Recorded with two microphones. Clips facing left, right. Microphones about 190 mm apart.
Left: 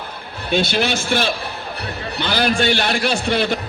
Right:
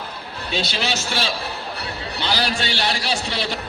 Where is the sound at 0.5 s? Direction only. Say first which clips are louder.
Left 6 dB; 55° left (ahead or behind).